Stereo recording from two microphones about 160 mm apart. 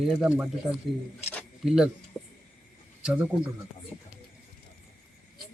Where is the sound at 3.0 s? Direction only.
5° right (ahead or behind).